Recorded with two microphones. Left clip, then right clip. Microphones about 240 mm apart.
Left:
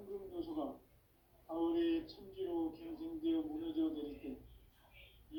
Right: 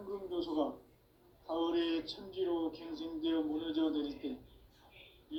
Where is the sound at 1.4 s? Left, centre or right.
Right.